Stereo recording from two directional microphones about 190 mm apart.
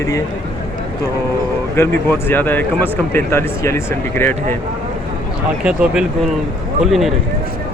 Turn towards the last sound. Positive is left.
turn(degrees=0)  # may be behind; listen again after turning